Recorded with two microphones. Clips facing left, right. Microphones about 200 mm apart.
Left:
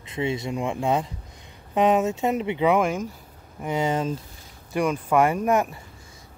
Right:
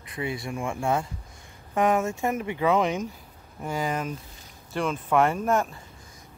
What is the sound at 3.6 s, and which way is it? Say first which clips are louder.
Speech: left 4 dB; 25° left (ahead or behind).